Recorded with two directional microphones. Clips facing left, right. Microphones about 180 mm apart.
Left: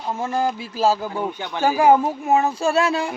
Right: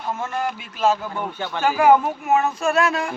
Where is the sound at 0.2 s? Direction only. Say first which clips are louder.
Left 4 dB; 30° left (ahead or behind).